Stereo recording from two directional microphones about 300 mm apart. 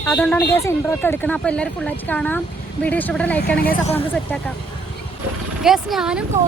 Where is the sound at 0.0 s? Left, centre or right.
Centre.